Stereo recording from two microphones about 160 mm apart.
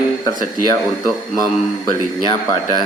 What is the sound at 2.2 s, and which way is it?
Speech, 25° left (ahead or behind).